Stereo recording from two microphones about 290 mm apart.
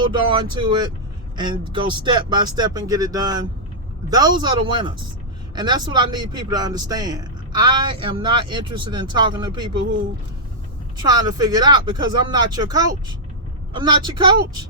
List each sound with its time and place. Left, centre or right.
0.0 s speech: centre
11.0 s speech: centre